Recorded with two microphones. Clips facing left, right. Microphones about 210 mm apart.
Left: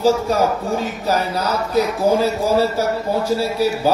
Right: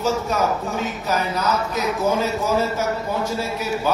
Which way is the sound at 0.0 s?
35° left (ahead or behind).